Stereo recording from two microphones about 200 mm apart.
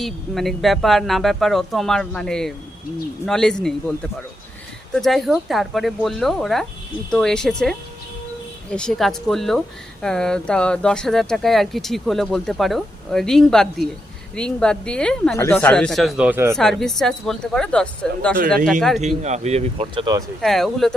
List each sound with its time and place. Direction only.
0.0 s speech: centre (ahead or behind)
16.6 s speech: centre (ahead or behind)
18.9 s speech: 35° right (ahead or behind)
20.4 s speech: centre (ahead or behind)